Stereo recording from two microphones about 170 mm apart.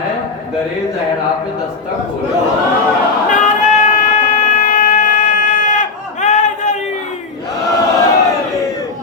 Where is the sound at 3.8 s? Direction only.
50° left (ahead or behind).